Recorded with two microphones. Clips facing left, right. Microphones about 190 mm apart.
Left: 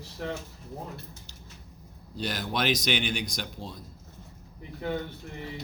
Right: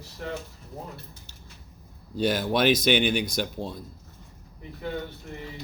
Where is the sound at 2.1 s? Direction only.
50° right (ahead or behind).